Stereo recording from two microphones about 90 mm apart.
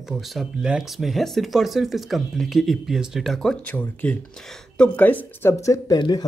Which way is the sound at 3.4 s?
15° left (ahead or behind).